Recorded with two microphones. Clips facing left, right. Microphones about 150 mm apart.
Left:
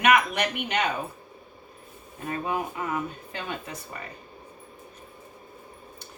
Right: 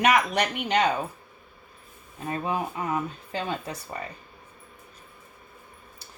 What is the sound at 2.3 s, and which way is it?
A woman's voice, 30° right (ahead or behind).